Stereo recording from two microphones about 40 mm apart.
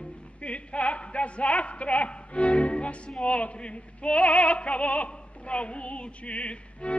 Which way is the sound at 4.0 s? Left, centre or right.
Left.